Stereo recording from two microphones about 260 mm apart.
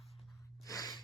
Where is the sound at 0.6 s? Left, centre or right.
Centre.